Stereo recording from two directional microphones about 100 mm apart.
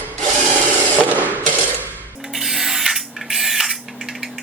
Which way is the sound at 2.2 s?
5° right (ahead or behind).